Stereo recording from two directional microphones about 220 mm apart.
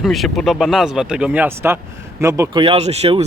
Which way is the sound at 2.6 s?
25° right (ahead or behind).